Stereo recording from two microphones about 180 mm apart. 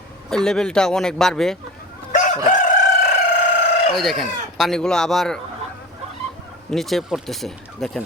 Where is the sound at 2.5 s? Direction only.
45° left (ahead or behind).